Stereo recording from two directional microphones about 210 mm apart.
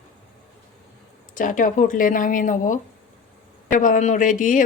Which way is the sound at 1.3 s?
40° left (ahead or behind).